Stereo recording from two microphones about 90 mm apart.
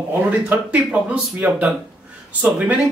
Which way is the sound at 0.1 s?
20° right (ahead or behind).